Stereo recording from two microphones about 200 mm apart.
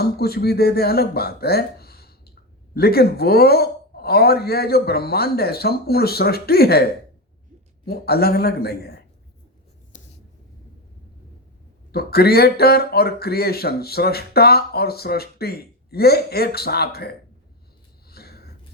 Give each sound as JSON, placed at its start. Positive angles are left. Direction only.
{"t": 0.0, "sound": "speech", "side_deg": 50}
{"t": 7.9, "sound": "speech", "side_deg": 50}
{"t": 11.9, "sound": "speech", "side_deg": 50}
{"t": 18.1, "sound": "a sound", "side_deg": 50}